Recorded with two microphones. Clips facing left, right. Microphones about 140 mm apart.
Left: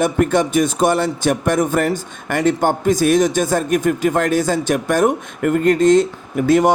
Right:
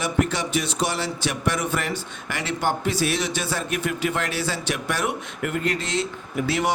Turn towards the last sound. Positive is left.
turn(degrees=45)  # may be behind; listen again after turning